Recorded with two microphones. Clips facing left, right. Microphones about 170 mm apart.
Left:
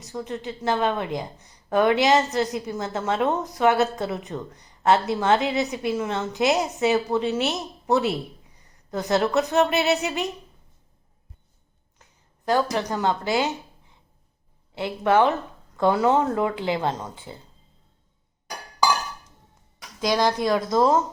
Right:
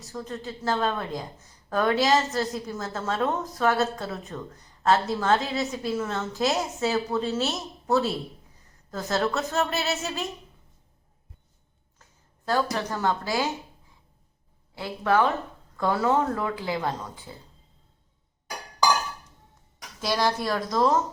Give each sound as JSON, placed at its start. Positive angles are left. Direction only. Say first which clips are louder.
{"t": 0.0, "sound": "a woman's voice", "louder": "left 3 dB", "side_deg": 20}
{"t": 12.5, "sound": "speech", "louder": "left 3 dB", "side_deg": 15}
{"t": 14.8, "sound": "speech", "louder": "left 3 dB", "side_deg": 25}
{"t": 20.0, "sound": "speech", "louder": "left 4 dB", "side_deg": 15}